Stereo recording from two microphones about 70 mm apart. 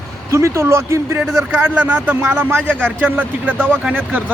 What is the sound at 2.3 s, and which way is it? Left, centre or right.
A man's voice, right.